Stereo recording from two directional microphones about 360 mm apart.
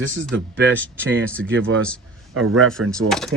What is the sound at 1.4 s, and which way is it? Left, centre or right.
Speech, right.